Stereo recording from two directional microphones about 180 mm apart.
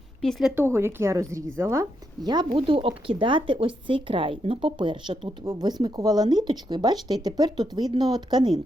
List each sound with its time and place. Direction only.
0.2 s a woman's voice: centre (ahead or behind)
0.5 s speech: 15° right (ahead or behind)